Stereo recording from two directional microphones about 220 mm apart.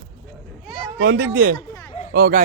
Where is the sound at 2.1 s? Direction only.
45° right (ahead or behind).